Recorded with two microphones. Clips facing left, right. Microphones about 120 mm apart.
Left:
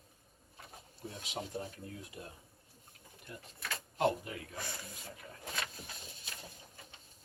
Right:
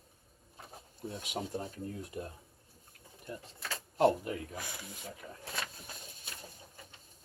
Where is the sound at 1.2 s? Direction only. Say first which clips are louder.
Right 2 dB; 50° right (ahead or behind).